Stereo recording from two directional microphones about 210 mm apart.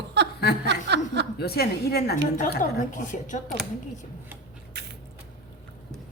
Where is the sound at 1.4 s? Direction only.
50° left (ahead or behind).